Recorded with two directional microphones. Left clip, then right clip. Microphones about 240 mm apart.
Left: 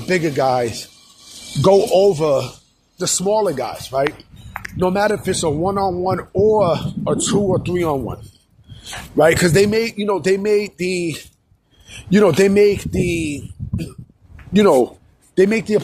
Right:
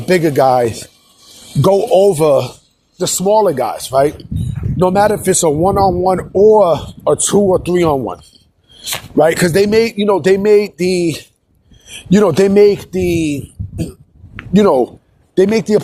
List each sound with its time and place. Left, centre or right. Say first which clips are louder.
0.0 s speech: right 6 dB; right